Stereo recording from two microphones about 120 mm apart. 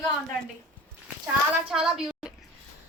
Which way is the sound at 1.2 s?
5° right (ahead or behind).